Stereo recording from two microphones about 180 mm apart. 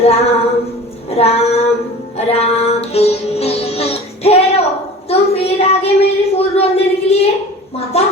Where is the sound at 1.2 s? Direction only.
35° left (ahead or behind).